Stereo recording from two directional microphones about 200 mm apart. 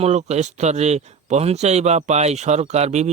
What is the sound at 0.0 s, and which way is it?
Speech, 35° right (ahead or behind).